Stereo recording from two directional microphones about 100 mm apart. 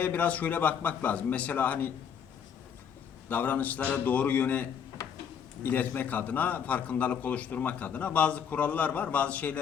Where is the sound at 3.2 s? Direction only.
15° left (ahead or behind).